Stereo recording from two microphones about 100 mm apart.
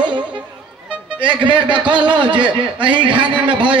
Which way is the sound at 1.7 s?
15° right (ahead or behind).